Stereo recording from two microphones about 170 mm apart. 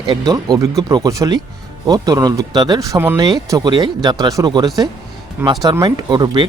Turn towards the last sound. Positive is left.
turn(degrees=-25)  # may be behind; listen again after turning